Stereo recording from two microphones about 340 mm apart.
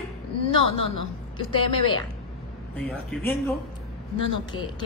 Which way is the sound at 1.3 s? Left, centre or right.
Centre.